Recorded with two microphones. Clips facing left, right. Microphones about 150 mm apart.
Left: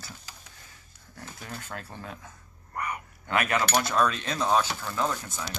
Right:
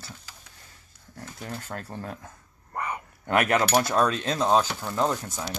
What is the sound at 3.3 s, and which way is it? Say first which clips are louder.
Speech: right 4 dB; 60° right (ahead or behind).